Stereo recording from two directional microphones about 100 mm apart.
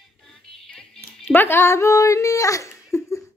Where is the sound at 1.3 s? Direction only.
20° left (ahead or behind).